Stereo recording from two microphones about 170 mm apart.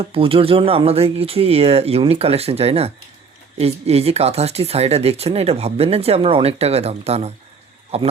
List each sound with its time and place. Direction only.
0.0 s speech: 30° right (ahead or behind)